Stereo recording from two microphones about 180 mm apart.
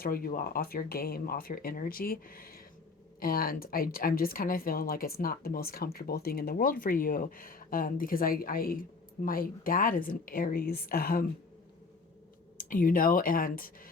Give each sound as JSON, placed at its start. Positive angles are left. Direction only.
{"t": 0.0, "sound": "a woman's voice", "side_deg": 55}
{"t": 12.5, "sound": "a woman's voice", "side_deg": 50}